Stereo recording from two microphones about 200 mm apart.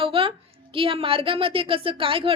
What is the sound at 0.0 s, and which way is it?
A woman's voice, 25° right (ahead or behind).